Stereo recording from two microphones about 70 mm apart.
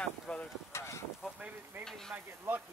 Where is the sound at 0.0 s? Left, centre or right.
Centre.